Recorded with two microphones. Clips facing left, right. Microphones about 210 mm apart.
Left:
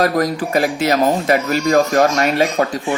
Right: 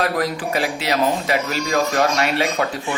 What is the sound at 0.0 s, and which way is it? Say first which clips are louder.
Speech: left 5 dB; 40° left (ahead or behind).